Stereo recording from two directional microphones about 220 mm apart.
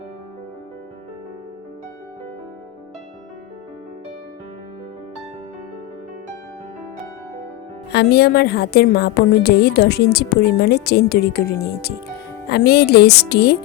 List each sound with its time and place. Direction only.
7.9 s a woman's voice: 45° left (ahead or behind)